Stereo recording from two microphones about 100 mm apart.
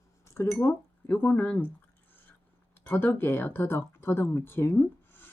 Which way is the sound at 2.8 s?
20° left (ahead or behind).